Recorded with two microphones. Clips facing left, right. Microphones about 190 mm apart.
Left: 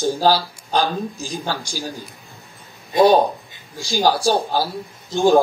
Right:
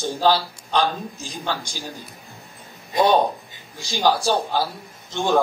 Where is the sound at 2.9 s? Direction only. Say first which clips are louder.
Left 4 dB; 35° left (ahead or behind).